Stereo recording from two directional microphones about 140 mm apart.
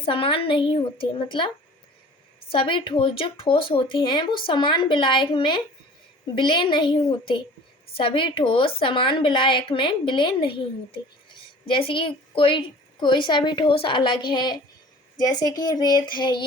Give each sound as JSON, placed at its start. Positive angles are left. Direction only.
{"t": 0.0, "sound": "speech", "side_deg": 40}